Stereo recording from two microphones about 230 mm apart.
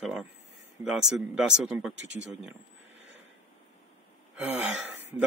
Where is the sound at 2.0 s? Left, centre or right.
Right.